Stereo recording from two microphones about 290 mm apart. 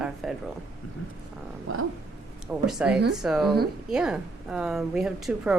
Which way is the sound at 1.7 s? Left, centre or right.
Right.